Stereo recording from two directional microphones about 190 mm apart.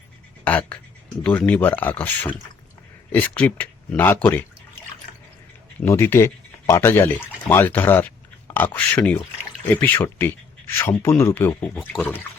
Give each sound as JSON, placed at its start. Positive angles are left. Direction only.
{"t": 0.4, "sound": "speech", "side_deg": 10}
{"t": 5.8, "sound": "speech", "side_deg": 15}